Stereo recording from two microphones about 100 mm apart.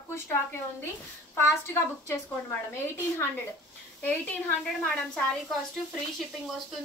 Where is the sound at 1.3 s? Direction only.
25° left (ahead or behind).